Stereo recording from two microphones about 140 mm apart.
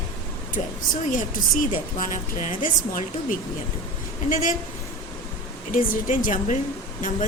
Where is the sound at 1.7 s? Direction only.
70° left (ahead or behind).